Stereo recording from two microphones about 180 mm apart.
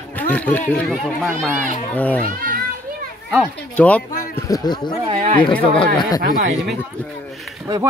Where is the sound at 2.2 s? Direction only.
50° right (ahead or behind).